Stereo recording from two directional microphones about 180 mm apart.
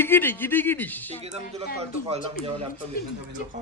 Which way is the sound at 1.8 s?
35° right (ahead or behind).